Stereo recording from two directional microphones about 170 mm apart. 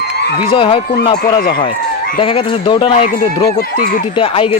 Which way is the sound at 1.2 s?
60° left (ahead or behind).